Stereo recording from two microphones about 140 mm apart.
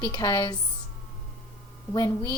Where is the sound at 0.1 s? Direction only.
30° left (ahead or behind).